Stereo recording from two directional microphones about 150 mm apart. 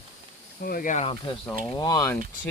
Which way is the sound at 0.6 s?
75° left (ahead or behind).